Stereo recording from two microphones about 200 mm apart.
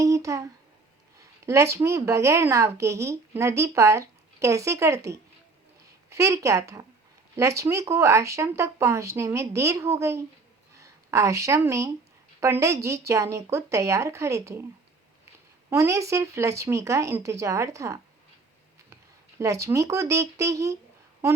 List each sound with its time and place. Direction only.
0.0 s a sound: 15° right (ahead or behind)
1.5 s speech: 15° right (ahead or behind)
15.7 s speech: 15° right (ahead or behind)
19.4 s speech: 15° right (ahead or behind)